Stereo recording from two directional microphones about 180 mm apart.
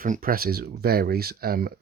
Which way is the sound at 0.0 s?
50° right (ahead or behind).